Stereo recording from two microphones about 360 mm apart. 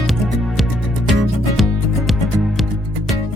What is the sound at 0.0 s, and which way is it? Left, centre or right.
Music, centre.